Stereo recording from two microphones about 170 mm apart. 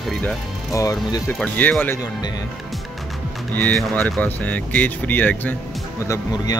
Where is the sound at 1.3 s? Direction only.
10° left (ahead or behind).